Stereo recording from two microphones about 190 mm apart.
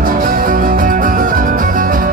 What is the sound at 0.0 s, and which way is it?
Music, 45° right (ahead or behind).